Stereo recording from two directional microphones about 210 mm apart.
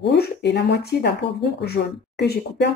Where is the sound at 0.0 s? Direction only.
50° left (ahead or behind).